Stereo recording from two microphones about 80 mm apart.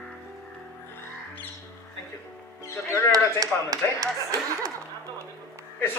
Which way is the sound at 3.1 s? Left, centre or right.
Right.